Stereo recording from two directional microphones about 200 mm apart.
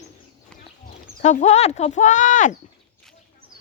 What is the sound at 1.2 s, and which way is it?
Speech, 35° left (ahead or behind).